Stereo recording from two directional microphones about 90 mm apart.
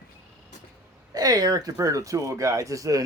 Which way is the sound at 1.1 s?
45° right (ahead or behind).